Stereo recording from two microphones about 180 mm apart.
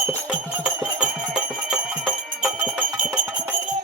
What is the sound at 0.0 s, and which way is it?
Music, 10° right (ahead or behind).